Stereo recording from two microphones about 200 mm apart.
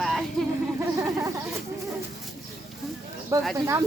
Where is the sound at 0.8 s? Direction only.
15° right (ahead or behind).